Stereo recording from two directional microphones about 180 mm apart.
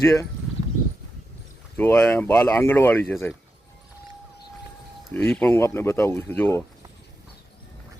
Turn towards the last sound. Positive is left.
turn(degrees=10)  # may be behind; listen again after turning